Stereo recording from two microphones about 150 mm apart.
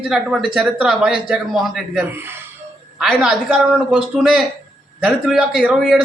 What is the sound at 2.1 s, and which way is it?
Speech, 15° right (ahead or behind).